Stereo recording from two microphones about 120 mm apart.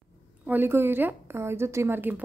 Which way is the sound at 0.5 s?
20° right (ahead or behind).